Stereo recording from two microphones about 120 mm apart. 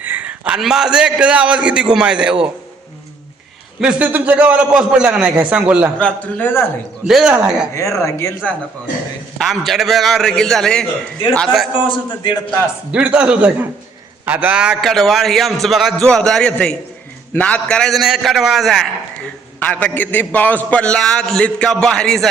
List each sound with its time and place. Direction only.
0.0 s a man's voice: 15° right (ahead or behind)
3.8 s a man's voice: 10° right (ahead or behind)
6.0 s a man's voice: 10° left (ahead or behind)
7.0 s speech: 5° right (ahead or behind)
7.8 s speech: 25° left (ahead or behind)
9.4 s speech: centre (ahead or behind)
11.9 s a man's voice: 40° left (ahead or behind)
12.9 s a man's voice: 10° right (ahead or behind)
19.6 s a man's voice: 15° left (ahead or behind)